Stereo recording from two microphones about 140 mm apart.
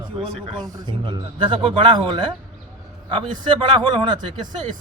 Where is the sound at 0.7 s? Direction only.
30° right (ahead or behind).